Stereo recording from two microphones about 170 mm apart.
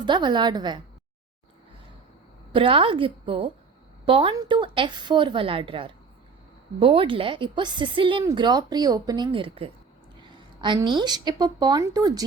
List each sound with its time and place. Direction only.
0.0 s a woman's voice: 25° right (ahead or behind)
2.5 s a woman's voice: 30° right (ahead or behind)